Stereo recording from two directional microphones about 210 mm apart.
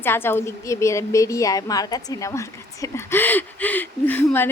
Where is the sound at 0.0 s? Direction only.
10° left (ahead or behind).